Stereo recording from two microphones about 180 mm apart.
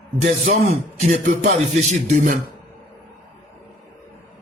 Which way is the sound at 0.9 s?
40° right (ahead or behind).